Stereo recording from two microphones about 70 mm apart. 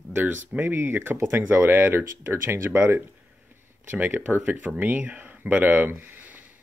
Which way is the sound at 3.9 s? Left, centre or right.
Right.